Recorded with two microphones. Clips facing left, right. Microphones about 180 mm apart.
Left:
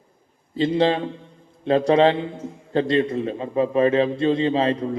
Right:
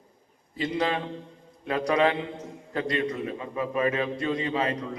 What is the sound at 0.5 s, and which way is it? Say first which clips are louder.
A man's voice: left 8 dB; 30° left (ahead or behind).